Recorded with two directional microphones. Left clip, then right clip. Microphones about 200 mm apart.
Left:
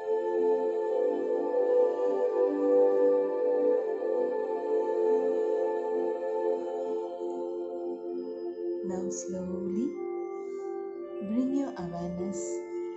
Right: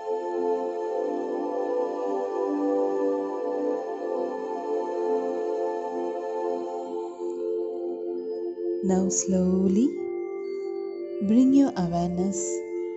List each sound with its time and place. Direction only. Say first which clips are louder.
0.1 s music: even; 35° right (ahead or behind)
8.8 s music: right 8 dB; 30° right (ahead or behind)
11.3 s music: right 11 dB; 30° right (ahead or behind)